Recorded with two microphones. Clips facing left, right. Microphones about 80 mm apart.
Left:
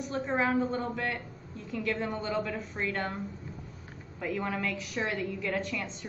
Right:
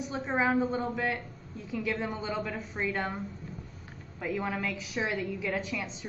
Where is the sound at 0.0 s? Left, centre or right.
Centre.